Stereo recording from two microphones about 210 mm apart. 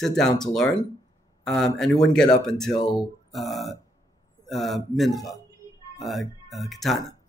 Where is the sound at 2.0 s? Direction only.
5° left (ahead or behind).